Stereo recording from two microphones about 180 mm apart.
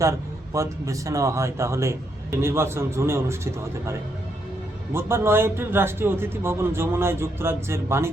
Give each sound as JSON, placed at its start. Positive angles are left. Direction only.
{"t": 0.0, "sound": "a man's voice", "side_deg": -15}
{"t": 4.9, "sound": "a man's voice", "side_deg": -15}